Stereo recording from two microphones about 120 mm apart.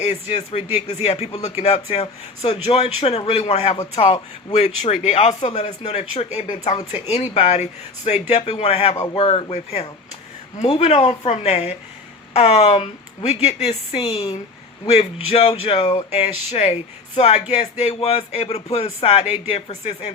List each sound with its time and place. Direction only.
0.0 s speech: 70° left (ahead or behind)
1.0 s a man's voice: 60° left (ahead or behind); by 6.7 s 80° left
6.9 s a man's voice: 60° left (ahead or behind)
9.1 s speech: 50° left (ahead or behind)
9.5 s a man's voice: 60° left (ahead or behind)
14.8 s a man's voice: 60° left (ahead or behind)
17.2 s a man's voice: 70° left (ahead or behind)